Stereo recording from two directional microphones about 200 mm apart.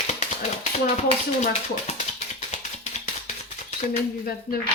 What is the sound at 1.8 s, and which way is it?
Music, 35° left (ahead or behind).